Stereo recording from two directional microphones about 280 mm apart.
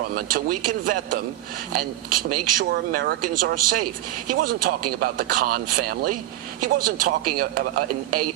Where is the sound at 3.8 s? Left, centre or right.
Right.